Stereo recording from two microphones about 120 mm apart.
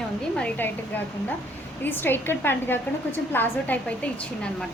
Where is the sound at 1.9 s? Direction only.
15° left (ahead or behind).